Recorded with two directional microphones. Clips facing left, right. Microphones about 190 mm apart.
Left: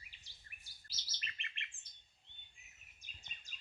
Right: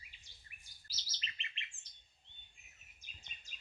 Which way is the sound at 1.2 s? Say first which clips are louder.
Even; 55° left (ahead or behind).